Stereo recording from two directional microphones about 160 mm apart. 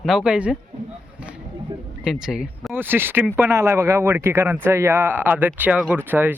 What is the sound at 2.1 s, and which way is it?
A man's voice, 5° right (ahead or behind).